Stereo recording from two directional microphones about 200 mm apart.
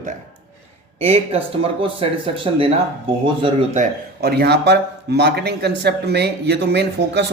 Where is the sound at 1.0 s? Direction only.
30° right (ahead or behind).